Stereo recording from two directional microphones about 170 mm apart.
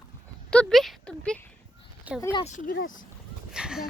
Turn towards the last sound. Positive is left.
turn(degrees=-5)  # may be behind; listen again after turning